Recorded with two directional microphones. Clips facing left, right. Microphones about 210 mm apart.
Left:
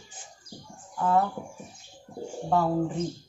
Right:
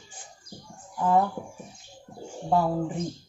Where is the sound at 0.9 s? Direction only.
15° right (ahead or behind).